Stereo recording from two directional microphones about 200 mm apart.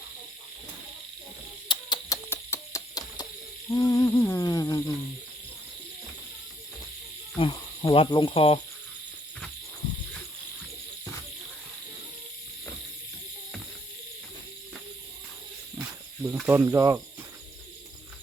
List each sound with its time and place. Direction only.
1.6 s a sound: 25° left (ahead or behind)
3.8 s hoot: 20° left (ahead or behind)
7.3 s speech: 25° left (ahead or behind)
16.2 s speech: 10° right (ahead or behind)